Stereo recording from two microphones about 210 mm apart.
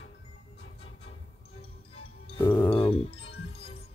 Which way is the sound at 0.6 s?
30° left (ahead or behind).